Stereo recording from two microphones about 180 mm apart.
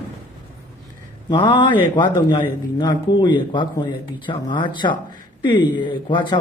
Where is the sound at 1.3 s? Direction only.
25° left (ahead or behind).